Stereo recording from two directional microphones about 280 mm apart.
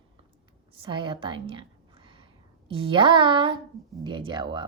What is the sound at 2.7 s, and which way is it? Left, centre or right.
A woman's voice, centre.